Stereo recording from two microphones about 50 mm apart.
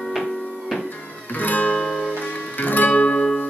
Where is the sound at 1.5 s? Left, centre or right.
Left.